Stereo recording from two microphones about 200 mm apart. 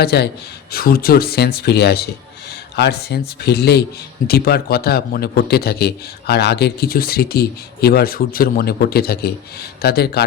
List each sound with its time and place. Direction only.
0.0 s a man's voice: 55° left (ahead or behind)